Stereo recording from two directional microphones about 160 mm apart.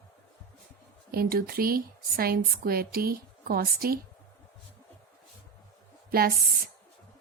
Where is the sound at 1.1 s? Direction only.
70° right (ahead or behind).